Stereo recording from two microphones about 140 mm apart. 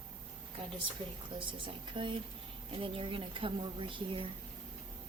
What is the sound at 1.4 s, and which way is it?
A woman's voice, 40° right (ahead or behind).